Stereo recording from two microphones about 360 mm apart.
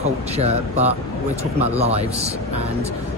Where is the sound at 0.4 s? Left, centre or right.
Centre.